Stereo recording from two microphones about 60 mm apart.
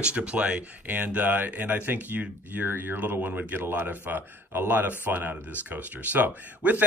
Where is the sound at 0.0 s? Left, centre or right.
Right.